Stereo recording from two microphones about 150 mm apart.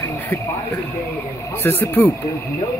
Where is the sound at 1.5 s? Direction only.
15° left (ahead or behind).